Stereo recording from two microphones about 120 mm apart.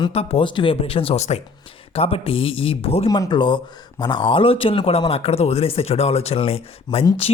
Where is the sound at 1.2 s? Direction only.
65° left (ahead or behind).